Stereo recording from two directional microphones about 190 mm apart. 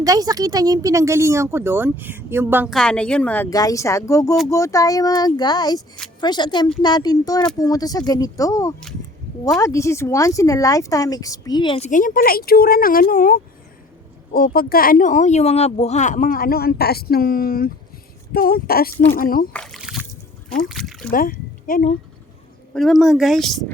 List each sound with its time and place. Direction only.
0.0 s speech: 20° right (ahead or behind)
2.7 s speech: 5° left (ahead or behind)
3.5 s speech: 20° left (ahead or behind)
11.9 s speech: 45° left (ahead or behind)
19.5 s splash: centre (ahead or behind)
20.5 s speech: centre (ahead or behind)
21.1 s speech: 50° left (ahead or behind)
22.7 s speech: centre (ahead or behind)